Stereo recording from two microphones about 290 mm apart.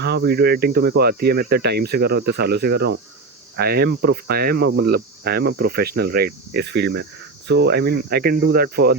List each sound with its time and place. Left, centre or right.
0.0 s speech: right